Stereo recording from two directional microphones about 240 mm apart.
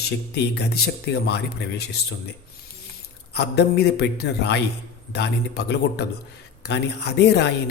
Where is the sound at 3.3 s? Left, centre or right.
Left.